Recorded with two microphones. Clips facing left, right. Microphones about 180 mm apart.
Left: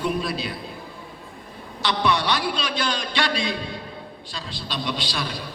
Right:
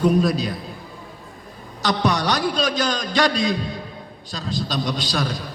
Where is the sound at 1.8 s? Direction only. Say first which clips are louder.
Right 2 dB; 40° right (ahead or behind).